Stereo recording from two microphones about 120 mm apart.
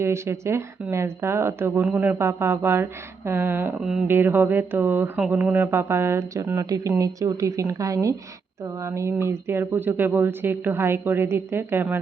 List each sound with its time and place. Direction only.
0.0 s speech: 20° right (ahead or behind)
3.8 s speech: 5° right (ahead or behind)
4.0 s speech: 15° right (ahead or behind)